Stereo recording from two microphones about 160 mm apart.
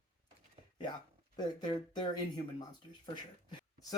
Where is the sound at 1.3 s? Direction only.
25° left (ahead or behind).